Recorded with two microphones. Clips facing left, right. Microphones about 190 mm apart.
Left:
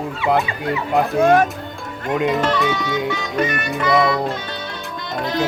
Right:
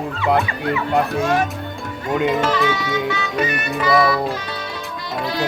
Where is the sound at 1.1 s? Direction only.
55° left (ahead or behind).